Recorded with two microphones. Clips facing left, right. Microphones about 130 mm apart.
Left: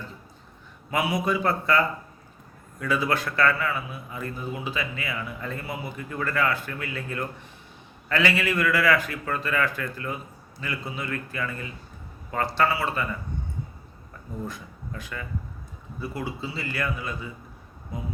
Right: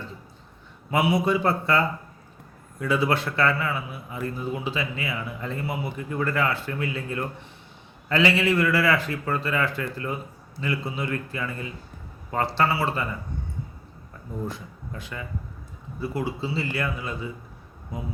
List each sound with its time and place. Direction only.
0.9 s a man's voice: 25° right (ahead or behind)
14.4 s a man's voice: 25° right (ahead or behind)